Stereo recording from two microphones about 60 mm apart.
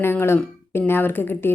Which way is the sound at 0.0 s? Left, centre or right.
Left.